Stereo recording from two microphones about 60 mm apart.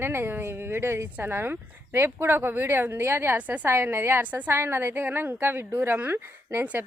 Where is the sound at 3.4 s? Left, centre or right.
Right.